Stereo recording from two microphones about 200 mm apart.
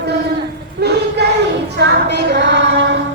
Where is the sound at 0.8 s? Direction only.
55° right (ahead or behind).